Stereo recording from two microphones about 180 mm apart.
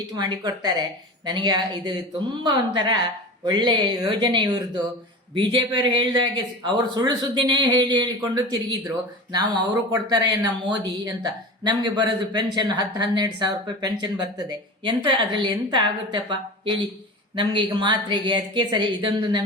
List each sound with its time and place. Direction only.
0.2 s speech: 25° right (ahead or behind)